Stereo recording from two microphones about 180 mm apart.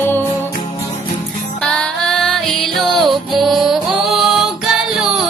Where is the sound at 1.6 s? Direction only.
5° left (ahead or behind).